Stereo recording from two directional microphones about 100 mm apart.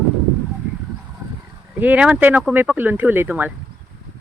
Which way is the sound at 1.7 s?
15° right (ahead or behind).